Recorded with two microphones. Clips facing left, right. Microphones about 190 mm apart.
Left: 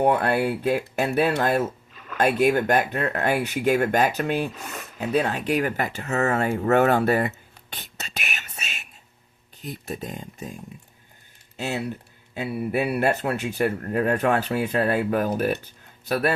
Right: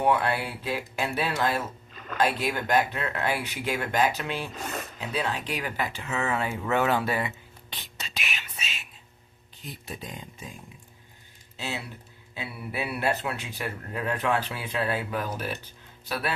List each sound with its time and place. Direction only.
0.0 s speech: 50° left (ahead or behind)
11.5 s speech: 50° left (ahead or behind)